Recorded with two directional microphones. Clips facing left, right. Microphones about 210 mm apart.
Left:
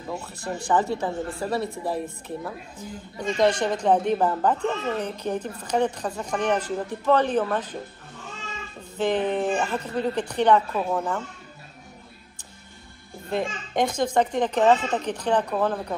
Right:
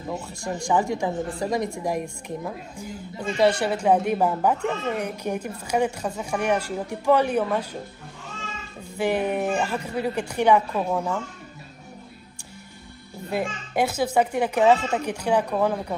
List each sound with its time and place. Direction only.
0.1 s speech: 10° right (ahead or behind)
8.9 s speech: 10° right (ahead or behind)
13.3 s speech: 5° right (ahead or behind)